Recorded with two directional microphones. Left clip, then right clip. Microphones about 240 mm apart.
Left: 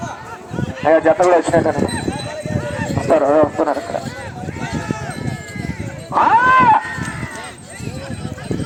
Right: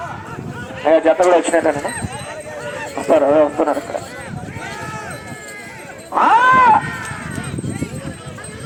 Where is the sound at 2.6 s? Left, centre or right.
Centre.